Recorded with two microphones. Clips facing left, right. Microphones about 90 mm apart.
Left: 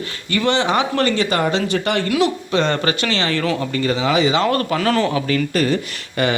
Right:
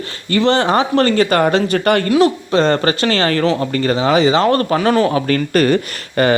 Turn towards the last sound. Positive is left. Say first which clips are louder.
# right 5 dB
turn(degrees=-55)  # may be behind; listen again after turning